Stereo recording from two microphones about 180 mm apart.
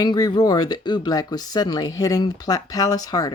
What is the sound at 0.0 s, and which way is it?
Speech, 20° left (ahead or behind).